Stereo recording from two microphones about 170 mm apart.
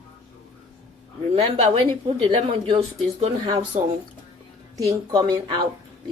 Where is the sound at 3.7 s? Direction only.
45° right (ahead or behind).